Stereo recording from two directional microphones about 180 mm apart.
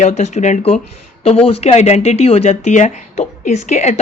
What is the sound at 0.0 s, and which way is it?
Speech, 40° left (ahead or behind).